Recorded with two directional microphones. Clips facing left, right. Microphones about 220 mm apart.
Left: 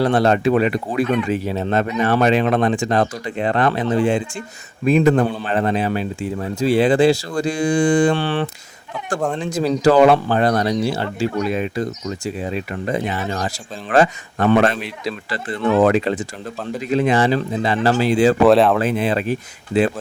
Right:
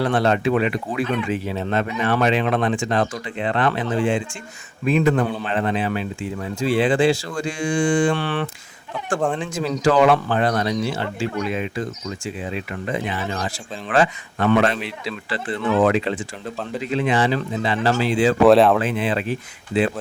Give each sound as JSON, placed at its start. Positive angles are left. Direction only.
{"t": 0.0, "sound": "speech", "side_deg": 40}
{"t": 18.4, "sound": "speech", "side_deg": 0}
{"t": 18.8, "sound": "speech", "side_deg": 40}